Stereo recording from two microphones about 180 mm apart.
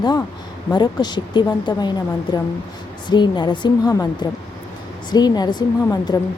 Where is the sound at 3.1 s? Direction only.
25° left (ahead or behind).